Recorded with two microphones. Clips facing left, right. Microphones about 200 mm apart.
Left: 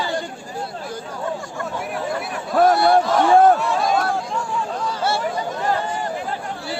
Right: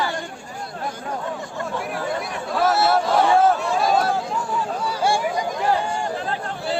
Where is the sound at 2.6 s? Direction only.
Centre (ahead or behind).